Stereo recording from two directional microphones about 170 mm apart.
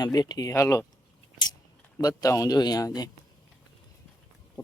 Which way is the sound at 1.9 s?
20° left (ahead or behind).